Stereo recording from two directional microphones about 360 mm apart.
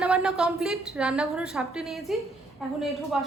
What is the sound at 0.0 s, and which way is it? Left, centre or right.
Speech, centre.